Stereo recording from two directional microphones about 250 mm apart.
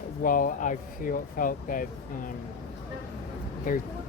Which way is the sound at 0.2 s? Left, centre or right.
Left.